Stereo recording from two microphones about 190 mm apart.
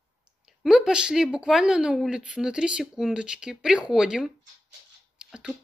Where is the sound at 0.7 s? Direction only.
5° right (ahead or behind).